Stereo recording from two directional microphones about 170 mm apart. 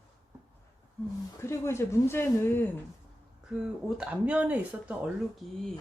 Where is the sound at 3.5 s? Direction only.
5° right (ahead or behind).